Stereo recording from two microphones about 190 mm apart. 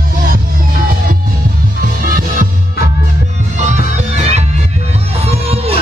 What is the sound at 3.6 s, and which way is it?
Music, 40° right (ahead or behind).